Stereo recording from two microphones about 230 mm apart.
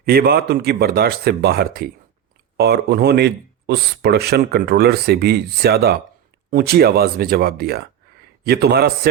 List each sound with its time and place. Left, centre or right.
0.0 s speech: right